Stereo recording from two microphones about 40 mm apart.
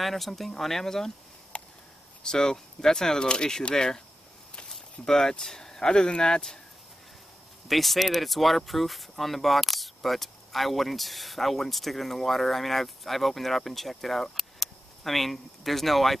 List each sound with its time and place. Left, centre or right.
0.0 s speech: centre
1.5 s a sound: left
2.2 s speech: centre
7.6 s speech: centre